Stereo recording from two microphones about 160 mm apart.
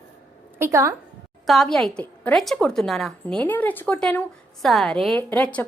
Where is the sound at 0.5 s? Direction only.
15° right (ahead or behind).